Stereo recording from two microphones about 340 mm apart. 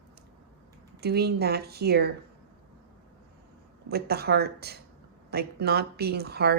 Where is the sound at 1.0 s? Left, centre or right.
Right.